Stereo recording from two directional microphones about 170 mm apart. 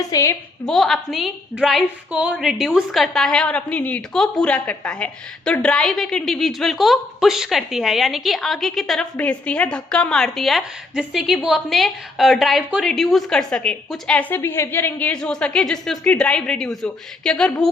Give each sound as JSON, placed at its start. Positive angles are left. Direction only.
{"t": 0.1, "sound": "a woman's voice", "side_deg": 20}
{"t": 0.7, "sound": "a woman's voice", "side_deg": 0}